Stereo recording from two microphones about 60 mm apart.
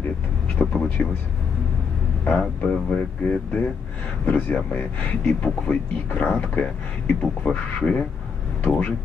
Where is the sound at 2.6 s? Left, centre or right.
Centre.